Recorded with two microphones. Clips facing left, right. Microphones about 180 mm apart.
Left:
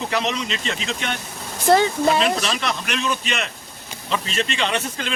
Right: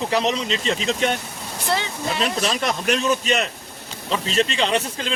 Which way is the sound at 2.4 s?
40° right (ahead or behind).